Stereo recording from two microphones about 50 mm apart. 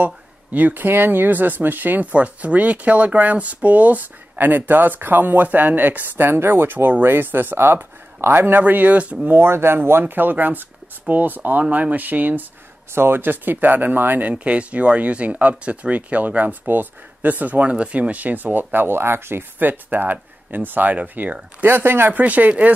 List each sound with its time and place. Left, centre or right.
0.0 s speech: right
9.3 s speech: right
12.9 s speech: right
14.3 s speech: right
19.7 s speech: right
21.6 s speech: right
22.1 s speech: right